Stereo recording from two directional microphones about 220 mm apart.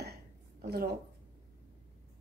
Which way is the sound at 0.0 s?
45° right (ahead or behind).